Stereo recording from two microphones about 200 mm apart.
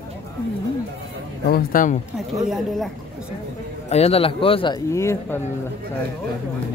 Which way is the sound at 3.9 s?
30° left (ahead or behind).